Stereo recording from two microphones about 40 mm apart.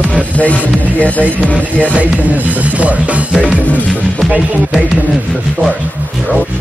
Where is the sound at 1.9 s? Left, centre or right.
Right.